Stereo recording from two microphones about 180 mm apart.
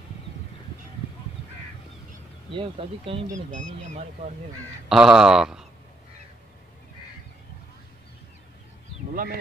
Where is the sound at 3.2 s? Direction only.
45° right (ahead or behind).